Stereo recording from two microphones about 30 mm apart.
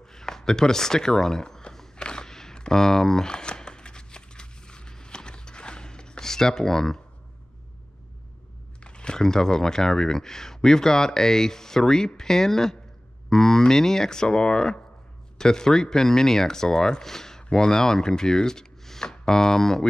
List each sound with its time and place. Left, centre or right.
0.0 s speech: centre
2.0 s a sound: left
2.2 s a sound: centre
2.7 s speech: centre
3.3 s a sound: left
6.2 s speech: centre
8.8 s crumpling: left
9.2 s speech: centre
15.3 s speech: left